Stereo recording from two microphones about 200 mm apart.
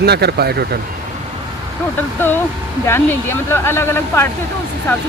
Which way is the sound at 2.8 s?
10° left (ahead or behind).